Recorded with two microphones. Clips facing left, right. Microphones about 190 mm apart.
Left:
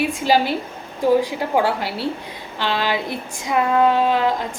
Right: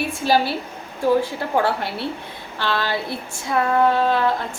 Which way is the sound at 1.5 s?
15° left (ahead or behind).